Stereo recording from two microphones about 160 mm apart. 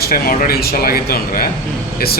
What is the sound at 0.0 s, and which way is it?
Speech, 65° left (ahead or behind).